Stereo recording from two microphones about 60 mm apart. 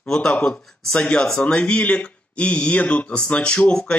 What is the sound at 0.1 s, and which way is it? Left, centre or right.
Speech, centre.